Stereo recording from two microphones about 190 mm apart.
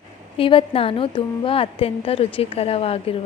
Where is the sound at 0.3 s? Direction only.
30° left (ahead or behind).